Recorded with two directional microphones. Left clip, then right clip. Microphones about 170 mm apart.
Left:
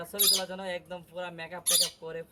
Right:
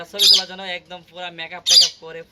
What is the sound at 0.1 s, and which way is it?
Speech, centre (ahead or behind).